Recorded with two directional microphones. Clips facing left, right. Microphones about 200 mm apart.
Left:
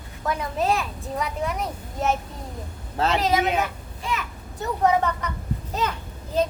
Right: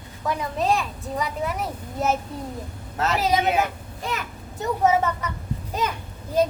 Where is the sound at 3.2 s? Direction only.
15° right (ahead or behind).